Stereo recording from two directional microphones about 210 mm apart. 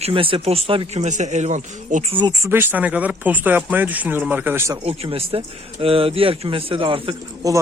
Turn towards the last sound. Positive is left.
turn(degrees=-20)  # may be behind; listen again after turning